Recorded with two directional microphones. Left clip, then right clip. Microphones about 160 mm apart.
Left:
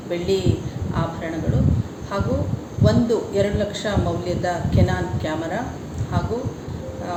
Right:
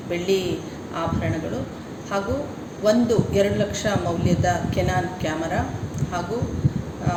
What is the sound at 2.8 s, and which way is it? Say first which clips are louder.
A man's voice: right 1 dB; centre (ahead or behind).